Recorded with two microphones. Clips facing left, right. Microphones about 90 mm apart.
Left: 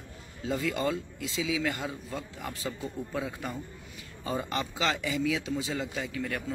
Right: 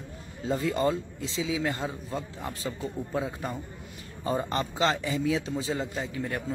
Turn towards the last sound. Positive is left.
turn(degrees=-30)  # may be behind; listen again after turning